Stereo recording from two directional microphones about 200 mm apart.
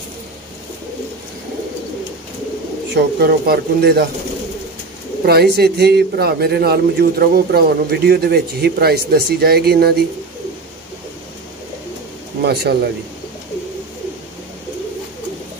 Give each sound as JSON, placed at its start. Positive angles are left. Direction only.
{"t": 2.9, "sound": "a man's voice", "side_deg": -50}
{"t": 5.2, "sound": "a man's voice", "side_deg": -50}
{"t": 12.4, "sound": "a man's voice", "side_deg": -55}